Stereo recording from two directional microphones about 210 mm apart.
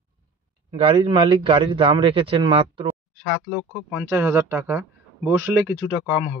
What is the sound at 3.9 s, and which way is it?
Speech, 10° right (ahead or behind).